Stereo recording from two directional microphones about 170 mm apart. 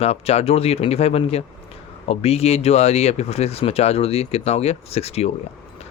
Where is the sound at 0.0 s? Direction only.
35° left (ahead or behind).